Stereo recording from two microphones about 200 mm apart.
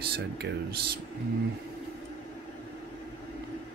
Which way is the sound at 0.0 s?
50° right (ahead or behind).